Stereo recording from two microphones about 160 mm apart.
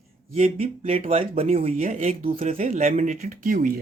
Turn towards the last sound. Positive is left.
turn(degrees=-55)  # may be behind; listen again after turning